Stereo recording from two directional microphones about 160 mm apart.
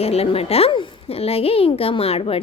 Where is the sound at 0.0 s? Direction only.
40° left (ahead or behind).